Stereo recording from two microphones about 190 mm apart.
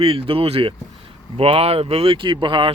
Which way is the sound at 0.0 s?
30° right (ahead or behind).